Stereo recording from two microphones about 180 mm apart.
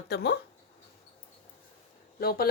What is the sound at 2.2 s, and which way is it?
Speech, 55° left (ahead or behind).